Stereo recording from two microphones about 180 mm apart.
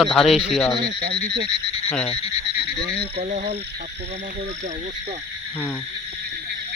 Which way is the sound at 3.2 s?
35° right (ahead or behind).